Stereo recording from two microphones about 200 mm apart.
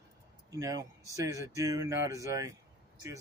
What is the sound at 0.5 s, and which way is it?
Speech, 15° right (ahead or behind).